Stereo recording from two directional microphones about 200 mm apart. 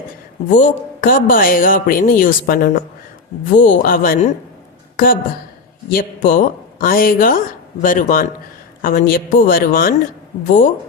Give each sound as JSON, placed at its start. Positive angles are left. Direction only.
{"t": 0.5, "sound": "a woman's voice", "side_deg": 40}
{"t": 5.9, "sound": "a woman's voice", "side_deg": 45}